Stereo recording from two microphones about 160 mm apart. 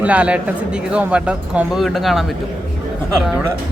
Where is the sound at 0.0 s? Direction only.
10° right (ahead or behind).